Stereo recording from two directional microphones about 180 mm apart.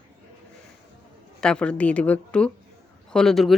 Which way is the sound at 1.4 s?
5° left (ahead or behind).